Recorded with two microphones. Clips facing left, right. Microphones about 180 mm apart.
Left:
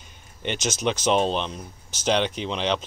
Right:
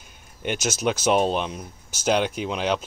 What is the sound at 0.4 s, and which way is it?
Speech, 5° right (ahead or behind).